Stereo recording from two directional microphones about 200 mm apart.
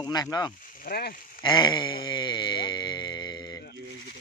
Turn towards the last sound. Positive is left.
turn(degrees=20)  # may be behind; listen again after turning